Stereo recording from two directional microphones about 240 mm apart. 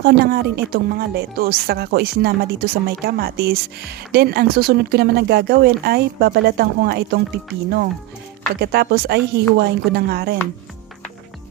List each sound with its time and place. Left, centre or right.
0.0 s a woman's voice: right
8.6 s a woman's voice: right